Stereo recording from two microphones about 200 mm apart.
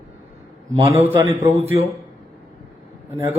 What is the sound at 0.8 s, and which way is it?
Speech, 15° right (ahead or behind).